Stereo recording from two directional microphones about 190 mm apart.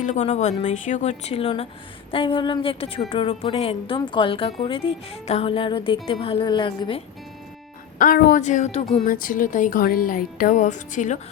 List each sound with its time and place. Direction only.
0.0 s a woman's voice: 40° left (ahead or behind)
7.9 s a woman's voice: 45° left (ahead or behind)
9.0 s speech: 45° left (ahead or behind)